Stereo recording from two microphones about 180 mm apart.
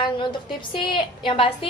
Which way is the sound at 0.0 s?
25° left (ahead or behind).